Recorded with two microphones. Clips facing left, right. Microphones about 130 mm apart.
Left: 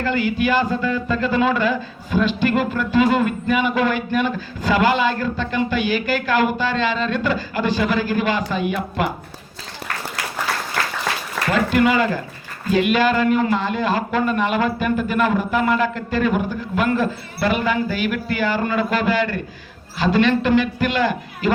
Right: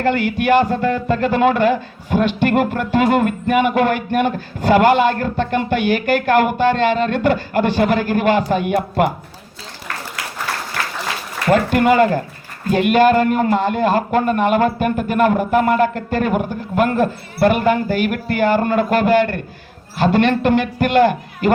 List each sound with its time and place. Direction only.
0.0 s a man's voice: 60° right (ahead or behind)
11.5 s speech: 50° right (ahead or behind)